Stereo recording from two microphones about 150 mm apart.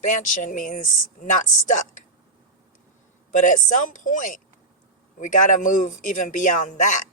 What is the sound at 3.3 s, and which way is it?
Speech, 60° left (ahead or behind).